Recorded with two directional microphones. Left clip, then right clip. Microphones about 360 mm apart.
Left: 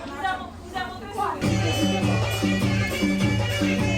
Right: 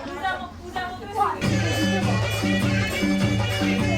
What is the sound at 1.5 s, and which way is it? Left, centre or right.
Music, centre.